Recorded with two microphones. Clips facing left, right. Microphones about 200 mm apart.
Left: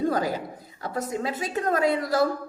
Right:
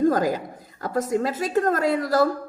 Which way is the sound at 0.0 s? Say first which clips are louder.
Right 5 dB; 45° right (ahead or behind).